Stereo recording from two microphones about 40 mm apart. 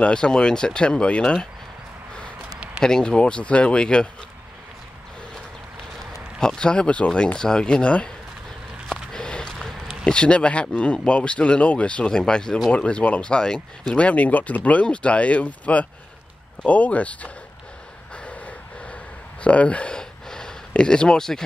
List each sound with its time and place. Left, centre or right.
0.0 s speech: left
2.8 s speech: centre
6.4 s speech: left
8.9 s a sound: centre
10.0 s speech: left
12.1 s speech: centre
13.9 s speech: left
18.1 s gasp: left
19.4 s speech: left
19.9 s a sound: centre